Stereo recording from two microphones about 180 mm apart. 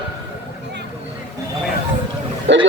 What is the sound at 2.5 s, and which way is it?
Speech, 80° right.